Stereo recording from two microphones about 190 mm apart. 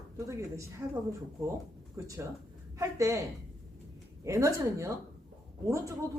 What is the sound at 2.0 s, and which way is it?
Speech, 15° right (ahead or behind).